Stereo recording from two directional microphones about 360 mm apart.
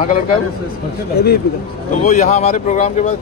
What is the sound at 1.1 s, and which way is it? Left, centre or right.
Speech, left.